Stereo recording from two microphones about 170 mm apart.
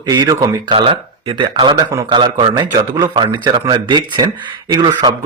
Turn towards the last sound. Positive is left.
turn(degrees=-25)  # may be behind; listen again after turning